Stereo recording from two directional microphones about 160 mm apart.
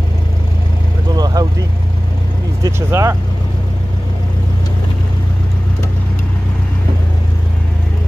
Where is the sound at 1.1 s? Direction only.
25° right (ahead or behind).